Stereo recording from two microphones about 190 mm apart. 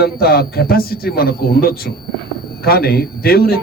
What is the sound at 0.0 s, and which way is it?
A man's voice, 55° left (ahead or behind).